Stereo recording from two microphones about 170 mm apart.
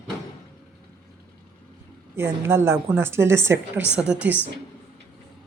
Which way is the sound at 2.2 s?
15° right (ahead or behind).